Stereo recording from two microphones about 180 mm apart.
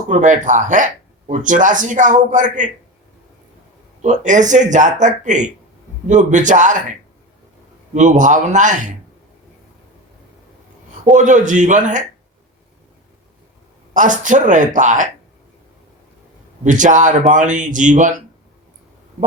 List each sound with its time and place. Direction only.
0.1 s speech: 45° right (ahead or behind)
4.0 s speech: 40° right (ahead or behind)
7.9 s speech: 40° right (ahead or behind)
11.1 s speech: 45° right (ahead or behind)
13.9 s speech: 45° right (ahead or behind)
16.6 s speech: 45° right (ahead or behind)